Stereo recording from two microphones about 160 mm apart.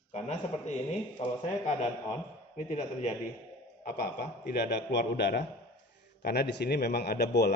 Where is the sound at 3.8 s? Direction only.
75° left (ahead or behind).